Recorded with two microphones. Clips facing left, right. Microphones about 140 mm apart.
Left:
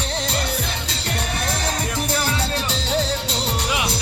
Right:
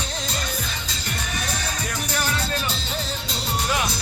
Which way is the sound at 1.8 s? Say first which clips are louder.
Left 4 dB; 25° left (ahead or behind).